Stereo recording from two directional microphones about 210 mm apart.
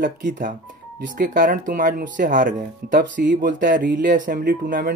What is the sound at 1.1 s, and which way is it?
Speech, 40° right (ahead or behind).